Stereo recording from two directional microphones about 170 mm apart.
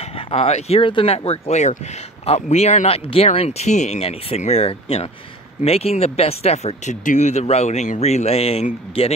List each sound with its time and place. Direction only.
0.3 s speech: 35° left (ahead or behind)